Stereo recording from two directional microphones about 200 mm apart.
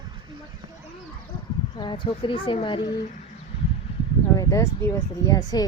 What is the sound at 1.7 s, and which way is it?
Speech, 25° left (ahead or behind).